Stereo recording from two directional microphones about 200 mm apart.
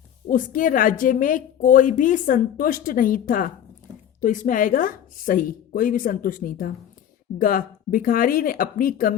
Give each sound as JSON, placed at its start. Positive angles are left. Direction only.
{"t": 0.3, "sound": "a woman's voice", "side_deg": 40}